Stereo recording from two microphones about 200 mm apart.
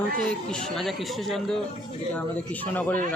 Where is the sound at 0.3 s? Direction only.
5° left (ahead or behind).